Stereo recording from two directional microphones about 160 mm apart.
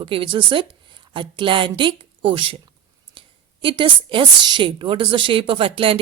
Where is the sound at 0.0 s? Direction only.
35° right (ahead or behind).